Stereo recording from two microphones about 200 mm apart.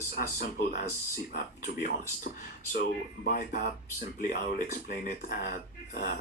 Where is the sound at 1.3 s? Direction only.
40° left (ahead or behind).